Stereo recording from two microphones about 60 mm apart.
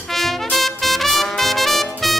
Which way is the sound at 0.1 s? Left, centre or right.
Centre.